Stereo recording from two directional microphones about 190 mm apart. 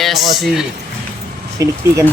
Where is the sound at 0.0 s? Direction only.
Centre (ahead or behind).